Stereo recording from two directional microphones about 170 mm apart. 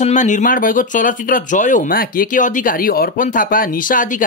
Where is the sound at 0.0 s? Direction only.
45° left (ahead or behind).